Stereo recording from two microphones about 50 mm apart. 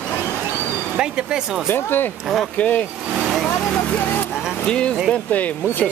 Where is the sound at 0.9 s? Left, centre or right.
Centre.